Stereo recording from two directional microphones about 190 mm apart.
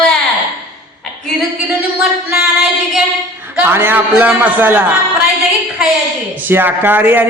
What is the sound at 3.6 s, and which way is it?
A man's voice, 10° right (ahead or behind).